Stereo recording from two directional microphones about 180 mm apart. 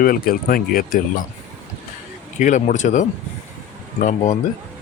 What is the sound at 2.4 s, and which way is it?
Speech, 45° left (ahead or behind).